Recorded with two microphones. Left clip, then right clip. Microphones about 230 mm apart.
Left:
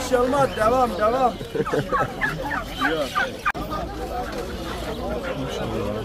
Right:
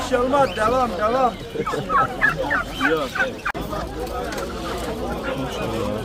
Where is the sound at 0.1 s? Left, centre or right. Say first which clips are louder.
Right 1 dB; left.